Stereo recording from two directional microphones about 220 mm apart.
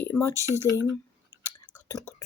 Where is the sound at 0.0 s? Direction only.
10° left (ahead or behind).